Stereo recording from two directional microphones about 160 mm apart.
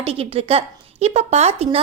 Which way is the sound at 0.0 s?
35° right (ahead or behind).